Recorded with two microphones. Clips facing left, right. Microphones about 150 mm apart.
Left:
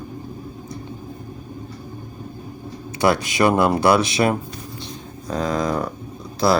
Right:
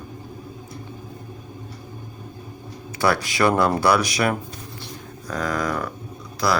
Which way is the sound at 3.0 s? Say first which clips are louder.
Left 2 dB; 20° left (ahead or behind).